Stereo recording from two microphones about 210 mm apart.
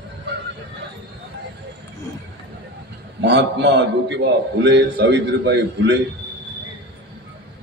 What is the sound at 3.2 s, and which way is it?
A man's voice, 55° right (ahead or behind).